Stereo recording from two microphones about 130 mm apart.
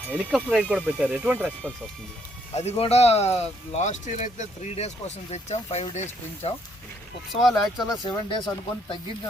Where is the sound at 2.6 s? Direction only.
55° left (ahead or behind).